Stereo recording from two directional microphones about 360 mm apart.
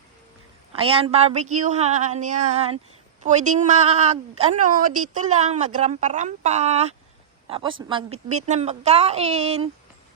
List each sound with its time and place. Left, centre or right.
0.7 s a woman's voice: centre